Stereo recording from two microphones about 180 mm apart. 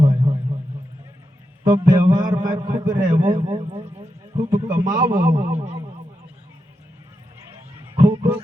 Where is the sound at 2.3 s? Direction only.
50° right (ahead or behind).